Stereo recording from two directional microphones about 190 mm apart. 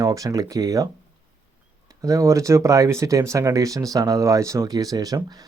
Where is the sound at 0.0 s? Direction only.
20° right (ahead or behind).